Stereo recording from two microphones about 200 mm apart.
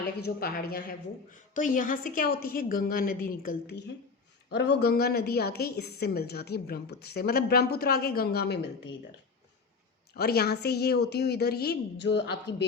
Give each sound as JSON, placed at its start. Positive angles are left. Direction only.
{"t": 0.3, "sound": "a woman's voice", "side_deg": 50}
{"t": 10.2, "sound": "a woman's voice", "side_deg": 50}